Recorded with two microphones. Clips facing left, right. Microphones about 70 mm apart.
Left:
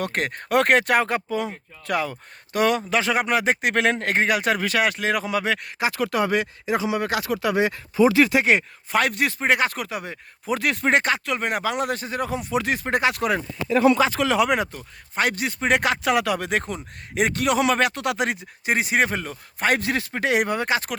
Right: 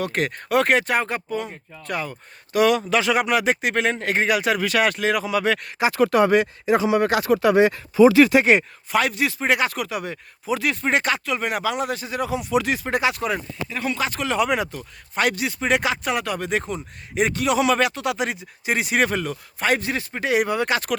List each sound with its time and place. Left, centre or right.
0.0 s speech: left
0.6 s speech: left
2.5 s a man's voice: left
5.9 s speech: right
9.0 s a man's voice: left
10.4 s speech: left
11.3 s a man's voice: left
13.1 s speech: left
15.1 s speech: left
16.0 s speech: left
18.8 s speech: left
19.5 s a man's voice: left
19.8 s speech: left
20.6 s speech: left